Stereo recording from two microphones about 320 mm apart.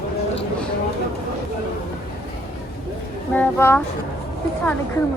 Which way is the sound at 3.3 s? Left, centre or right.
Centre.